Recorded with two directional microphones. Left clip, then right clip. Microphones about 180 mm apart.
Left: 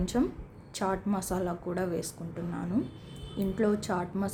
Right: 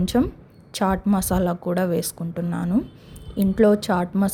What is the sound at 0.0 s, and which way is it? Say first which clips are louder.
A woman's voice: right 8 dB; 45° right (ahead or behind).